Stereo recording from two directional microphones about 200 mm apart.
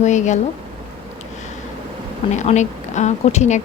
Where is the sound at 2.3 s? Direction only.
35° left (ahead or behind).